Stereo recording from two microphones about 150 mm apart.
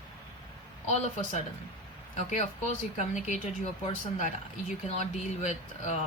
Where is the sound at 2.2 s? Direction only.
50° left (ahead or behind).